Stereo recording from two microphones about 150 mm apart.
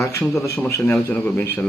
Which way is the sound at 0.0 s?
20° left (ahead or behind).